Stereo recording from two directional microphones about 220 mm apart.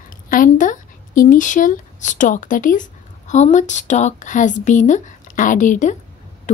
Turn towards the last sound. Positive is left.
turn(degrees=35)  # may be behind; listen again after turning